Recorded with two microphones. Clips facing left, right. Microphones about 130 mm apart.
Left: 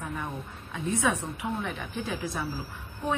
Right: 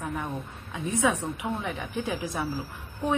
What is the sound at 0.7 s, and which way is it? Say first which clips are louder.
A woman's voice: right 2 dB; 15° right (ahead or behind).